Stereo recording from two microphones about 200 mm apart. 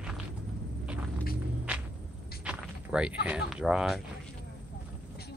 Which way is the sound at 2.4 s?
5° right (ahead or behind).